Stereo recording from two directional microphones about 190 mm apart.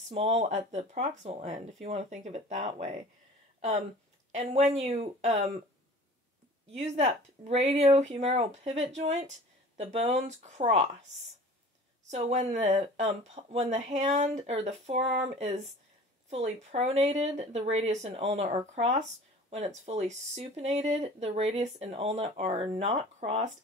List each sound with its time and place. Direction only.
0.1 s speech: 35° right (ahead or behind)
4.4 s speech: 35° right (ahead or behind)
6.8 s speech: 35° right (ahead or behind)
12.1 s speech: 35° right (ahead or behind)